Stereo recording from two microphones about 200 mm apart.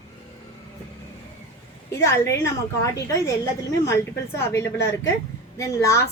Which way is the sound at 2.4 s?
15° left (ahead or behind).